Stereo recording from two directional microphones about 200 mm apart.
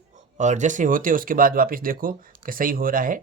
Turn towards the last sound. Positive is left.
turn(degrees=-45)  # may be behind; listen again after turning